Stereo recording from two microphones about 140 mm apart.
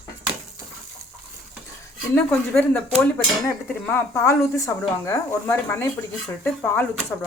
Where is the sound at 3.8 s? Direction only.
20° left (ahead or behind).